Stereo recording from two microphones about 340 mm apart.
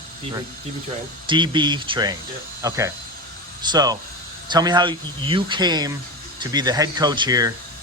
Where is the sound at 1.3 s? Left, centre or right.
Centre.